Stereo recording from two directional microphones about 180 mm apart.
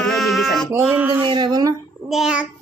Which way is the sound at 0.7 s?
10° right (ahead or behind).